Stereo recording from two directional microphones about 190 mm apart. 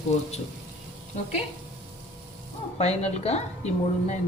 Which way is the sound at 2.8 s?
35° left (ahead or behind).